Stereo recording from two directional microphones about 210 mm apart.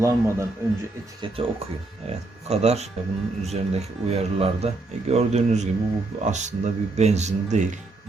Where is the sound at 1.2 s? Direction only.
25° right (ahead or behind).